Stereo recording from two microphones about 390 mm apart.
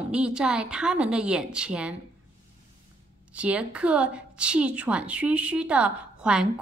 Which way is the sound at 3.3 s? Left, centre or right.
Centre.